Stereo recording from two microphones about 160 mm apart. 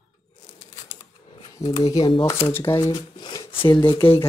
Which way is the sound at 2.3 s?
15° left (ahead or behind).